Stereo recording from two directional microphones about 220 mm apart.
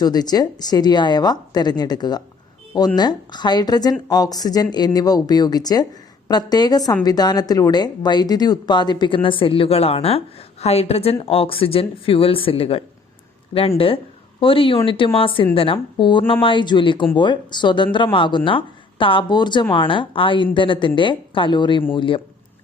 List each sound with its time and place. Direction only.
0.0 s a woman's voice: 20° left (ahead or behind)